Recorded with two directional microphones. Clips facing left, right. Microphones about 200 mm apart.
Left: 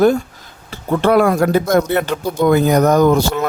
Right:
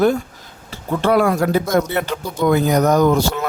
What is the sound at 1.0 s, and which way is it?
A man's voice, 50° left (ahead or behind).